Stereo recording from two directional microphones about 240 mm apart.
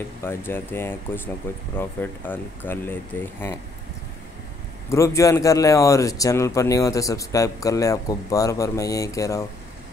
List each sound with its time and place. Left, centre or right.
0.2 s a man's voice: centre
4.8 s a man's voice: centre